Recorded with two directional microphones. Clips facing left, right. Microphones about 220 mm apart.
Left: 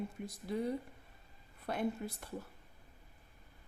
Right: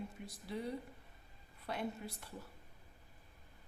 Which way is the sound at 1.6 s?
50° left (ahead or behind).